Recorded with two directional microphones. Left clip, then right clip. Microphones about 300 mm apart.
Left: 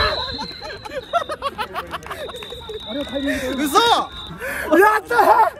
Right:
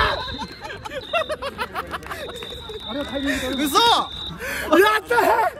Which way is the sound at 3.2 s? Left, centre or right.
Centre.